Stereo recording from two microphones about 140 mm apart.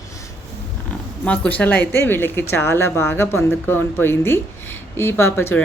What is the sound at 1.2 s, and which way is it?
Speech, 10° left (ahead or behind).